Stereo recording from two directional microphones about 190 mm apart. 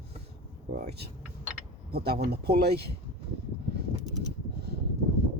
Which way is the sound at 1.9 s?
55° right (ahead or behind).